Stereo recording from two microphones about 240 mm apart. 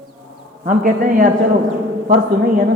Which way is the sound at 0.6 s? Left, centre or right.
Right.